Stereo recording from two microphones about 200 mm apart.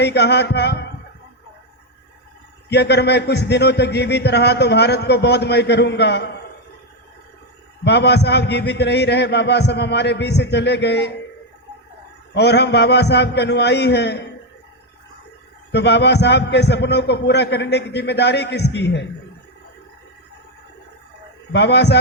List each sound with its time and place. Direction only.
0.0 s a man's voice: 55° left (ahead or behind)
2.6 s a man's voice: 55° left (ahead or behind)
7.9 s a man's voice: 55° left (ahead or behind)
12.3 s a man's voice: 55° left (ahead or behind)
15.7 s a man's voice: 55° left (ahead or behind)
21.5 s a man's voice: 55° left (ahead or behind)